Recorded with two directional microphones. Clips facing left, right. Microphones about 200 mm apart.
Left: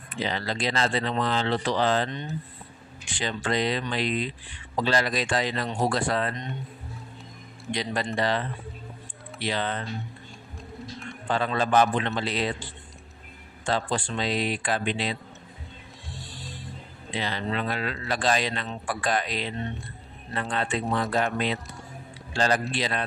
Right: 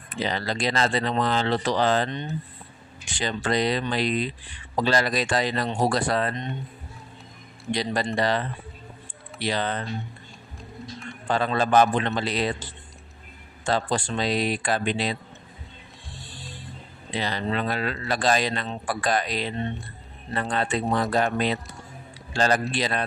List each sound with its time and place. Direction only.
0.2 s speech: 40° right (ahead or behind)
3.1 s speech: 40° right (ahead or behind)
7.7 s speech: 35° right (ahead or behind)
11.2 s speech: 40° right (ahead or behind)
13.7 s speech: 40° right (ahead or behind)
17.2 s speech: 40° right (ahead or behind)